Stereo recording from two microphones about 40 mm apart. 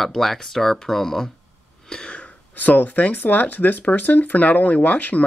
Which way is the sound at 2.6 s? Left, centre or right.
Left.